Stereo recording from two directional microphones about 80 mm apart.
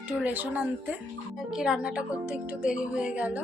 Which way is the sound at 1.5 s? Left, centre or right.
Centre.